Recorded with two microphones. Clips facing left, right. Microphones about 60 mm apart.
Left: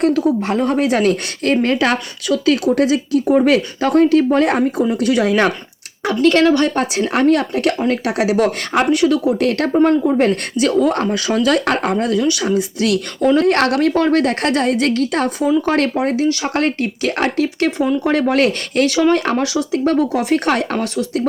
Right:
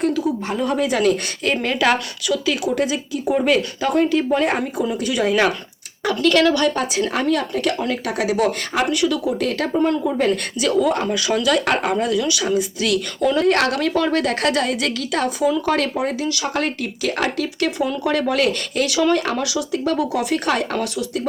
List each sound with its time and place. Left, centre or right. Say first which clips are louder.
0.0 s speech: left 5 dB; left
0.6 s speech: left 2 dB; left
6.2 s speech: left 3 dB; left
7.1 s speech: left 6 dB; left
9.2 s speech: left 5 dB; left
10.2 s speech: left 4 dB; left
12.5 s speech: left 3 dB; left